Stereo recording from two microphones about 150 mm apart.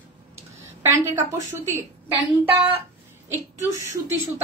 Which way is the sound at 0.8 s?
15° right (ahead or behind).